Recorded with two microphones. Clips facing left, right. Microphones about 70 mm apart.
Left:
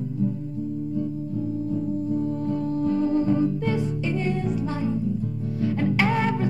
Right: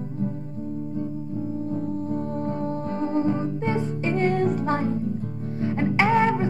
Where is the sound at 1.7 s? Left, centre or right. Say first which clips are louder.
Left 2 dB; right.